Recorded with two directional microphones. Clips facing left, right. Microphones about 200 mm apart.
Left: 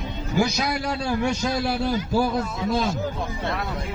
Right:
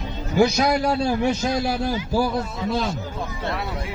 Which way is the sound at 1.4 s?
45° right (ahead or behind).